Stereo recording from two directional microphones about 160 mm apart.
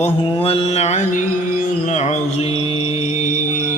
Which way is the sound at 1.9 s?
45° left (ahead or behind).